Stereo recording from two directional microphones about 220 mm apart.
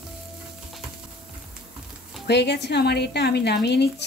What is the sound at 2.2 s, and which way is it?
Speech, 50° left (ahead or behind).